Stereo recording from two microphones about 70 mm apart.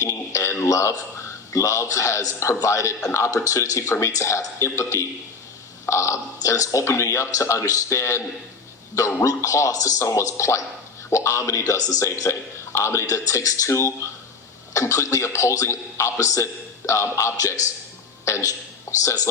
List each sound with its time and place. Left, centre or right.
0.0 s a sound: left
0.6 s a man's voice: left
9.2 s a man's voice: left